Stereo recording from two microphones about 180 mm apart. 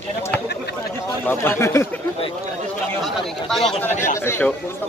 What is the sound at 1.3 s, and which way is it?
Speech, 15° left (ahead or behind).